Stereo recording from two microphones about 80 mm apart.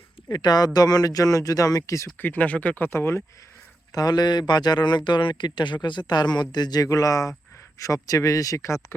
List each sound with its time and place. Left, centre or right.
0.3 s speech: left
2.1 s speech: left
3.9 s speech: left
6.8 s speech: left